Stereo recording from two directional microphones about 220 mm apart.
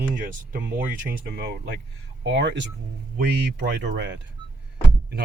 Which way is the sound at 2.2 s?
55° right (ahead or behind).